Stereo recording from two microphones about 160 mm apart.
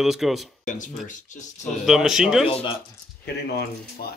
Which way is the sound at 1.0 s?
50° left (ahead or behind).